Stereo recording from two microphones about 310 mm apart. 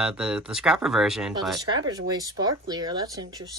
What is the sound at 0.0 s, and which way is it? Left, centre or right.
A woman's voice, centre.